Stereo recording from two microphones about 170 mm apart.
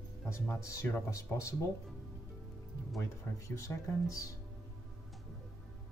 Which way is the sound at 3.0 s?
20° left (ahead or behind).